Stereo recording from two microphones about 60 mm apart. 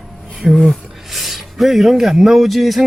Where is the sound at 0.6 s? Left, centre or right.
Centre.